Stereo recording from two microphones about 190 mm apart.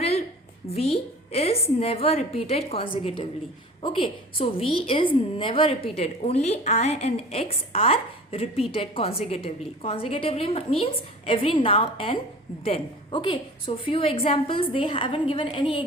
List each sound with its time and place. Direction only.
0.7 s a woman's voice: 30° left (ahead or behind)